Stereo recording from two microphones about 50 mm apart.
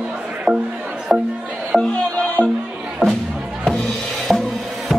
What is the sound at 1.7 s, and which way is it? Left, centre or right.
Music, centre.